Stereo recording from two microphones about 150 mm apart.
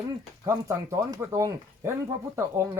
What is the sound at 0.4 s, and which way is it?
Speech, 20° right (ahead or behind).